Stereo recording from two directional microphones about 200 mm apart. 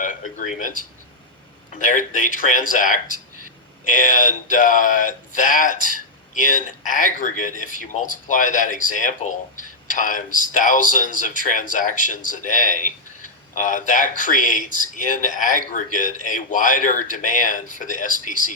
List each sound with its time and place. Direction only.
0.0 s speech: 40° left (ahead or behind)
1.8 s speech: 40° left (ahead or behind)